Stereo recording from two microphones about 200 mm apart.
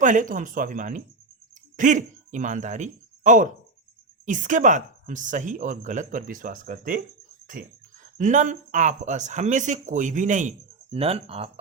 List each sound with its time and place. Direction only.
0.0 s speech: 40° right (ahead or behind)